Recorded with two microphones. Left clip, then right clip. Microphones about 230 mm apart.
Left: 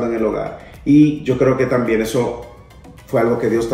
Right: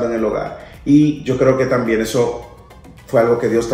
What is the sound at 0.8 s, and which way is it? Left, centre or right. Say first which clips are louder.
Speech: left 1 dB; centre.